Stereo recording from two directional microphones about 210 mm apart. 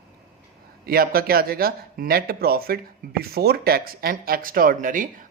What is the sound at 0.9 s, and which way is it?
Speech, 45° right (ahead or behind).